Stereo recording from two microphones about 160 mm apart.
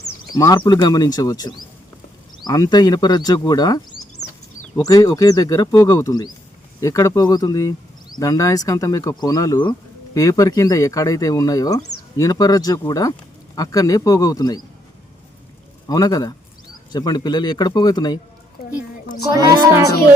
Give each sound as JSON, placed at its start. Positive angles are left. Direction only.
{"t": 0.3, "sound": "speech", "side_deg": 25}
{"t": 15.9, "sound": "speech", "side_deg": 25}